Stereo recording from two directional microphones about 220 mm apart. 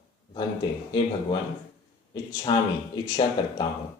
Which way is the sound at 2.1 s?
20° left (ahead or behind).